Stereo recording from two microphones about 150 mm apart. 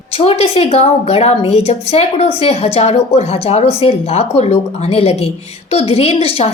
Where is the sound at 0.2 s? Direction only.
40° left (ahead or behind).